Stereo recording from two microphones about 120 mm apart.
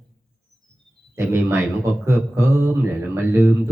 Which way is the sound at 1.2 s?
15° right (ahead or behind).